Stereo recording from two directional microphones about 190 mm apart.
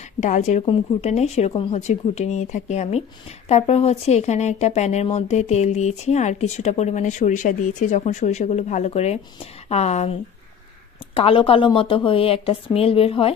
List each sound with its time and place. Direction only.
0.2 s speech: 40° left (ahead or behind)
11.1 s a woman's voice: 30° left (ahead or behind)